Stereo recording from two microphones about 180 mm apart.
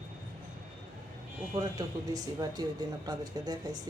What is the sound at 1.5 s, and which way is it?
Speech, 20° right (ahead or behind).